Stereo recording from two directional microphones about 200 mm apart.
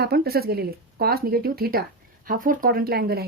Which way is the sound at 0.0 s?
50° right (ahead or behind).